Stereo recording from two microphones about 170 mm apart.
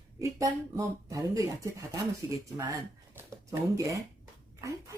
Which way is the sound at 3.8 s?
20° right (ahead or behind).